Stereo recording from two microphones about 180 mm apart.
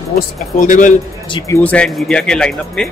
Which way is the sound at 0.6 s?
45° left (ahead or behind).